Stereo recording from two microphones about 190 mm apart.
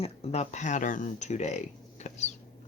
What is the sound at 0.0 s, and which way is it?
Speech, 35° left (ahead or behind).